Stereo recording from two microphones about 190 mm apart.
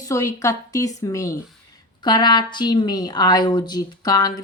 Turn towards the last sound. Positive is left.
turn(degrees=20)  # may be behind; listen again after turning